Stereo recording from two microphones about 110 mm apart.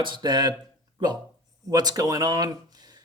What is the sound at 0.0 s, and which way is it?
Speech, 45° right (ahead or behind).